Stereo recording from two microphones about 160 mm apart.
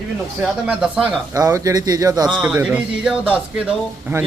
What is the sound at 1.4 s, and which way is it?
Speech, 20° right (ahead or behind).